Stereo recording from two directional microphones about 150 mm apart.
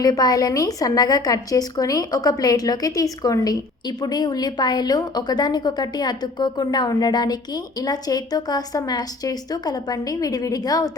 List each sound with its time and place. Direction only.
0.0 s a woman's voice: 25° left (ahead or behind)